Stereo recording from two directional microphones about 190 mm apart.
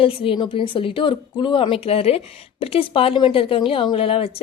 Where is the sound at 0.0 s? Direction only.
30° left (ahead or behind).